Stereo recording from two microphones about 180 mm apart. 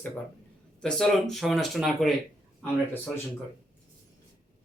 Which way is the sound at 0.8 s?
5° left (ahead or behind).